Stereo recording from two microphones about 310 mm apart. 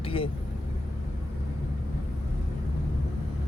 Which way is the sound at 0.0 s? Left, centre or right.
Centre.